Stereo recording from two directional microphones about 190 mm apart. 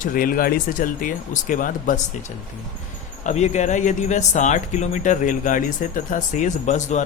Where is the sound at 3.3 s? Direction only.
40° left (ahead or behind).